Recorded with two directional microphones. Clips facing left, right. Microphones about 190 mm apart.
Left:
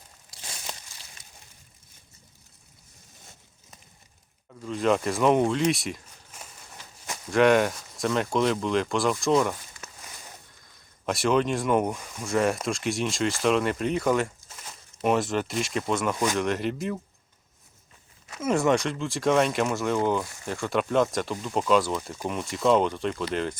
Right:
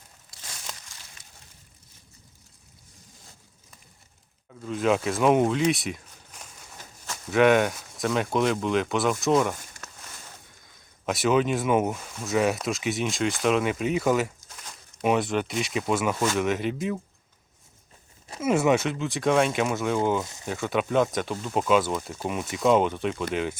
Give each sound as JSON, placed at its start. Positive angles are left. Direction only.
{"t": 4.6, "sound": "speech", "side_deg": -5}
{"t": 10.7, "sound": "speech", "side_deg": 0}
{"t": 18.3, "sound": "speech", "side_deg": -5}
{"t": 20.2, "sound": "speech", "side_deg": -20}
{"t": 20.5, "sound": "speech", "side_deg": 0}